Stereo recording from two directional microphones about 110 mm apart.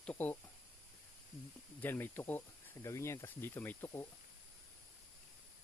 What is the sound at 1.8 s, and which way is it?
Speech, 20° left (ahead or behind).